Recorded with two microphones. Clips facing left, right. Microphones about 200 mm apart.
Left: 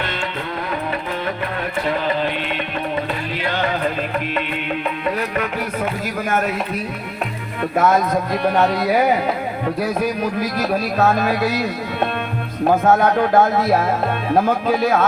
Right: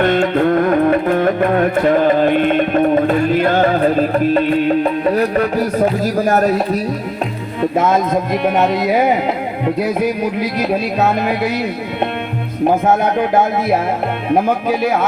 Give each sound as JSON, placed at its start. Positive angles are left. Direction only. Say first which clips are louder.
{"t": 0.0, "sound": "music", "louder": "right 13 dB", "side_deg": -50}
{"t": 7.6, "sound": "speech", "louder": "right 2 dB", "side_deg": -25}